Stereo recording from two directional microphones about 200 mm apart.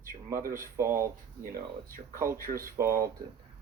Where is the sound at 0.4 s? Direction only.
45° right (ahead or behind).